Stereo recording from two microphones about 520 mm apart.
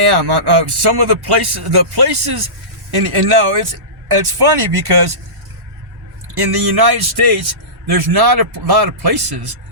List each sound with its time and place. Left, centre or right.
0.1 s speech: right
6.3 s speech: right